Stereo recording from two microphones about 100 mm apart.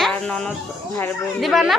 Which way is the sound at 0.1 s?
10° left (ahead or behind).